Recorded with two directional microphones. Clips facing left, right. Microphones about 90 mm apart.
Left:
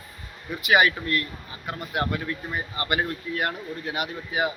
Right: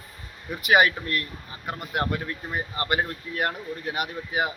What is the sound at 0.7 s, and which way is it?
A man's voice, 40° right (ahead or behind).